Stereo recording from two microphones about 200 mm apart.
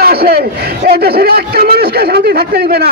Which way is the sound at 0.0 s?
50° right (ahead or behind).